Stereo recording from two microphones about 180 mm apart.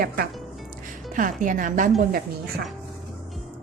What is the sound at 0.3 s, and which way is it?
Music, centre (ahead or behind).